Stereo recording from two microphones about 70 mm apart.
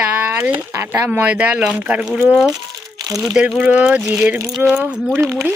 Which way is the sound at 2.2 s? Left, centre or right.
Centre.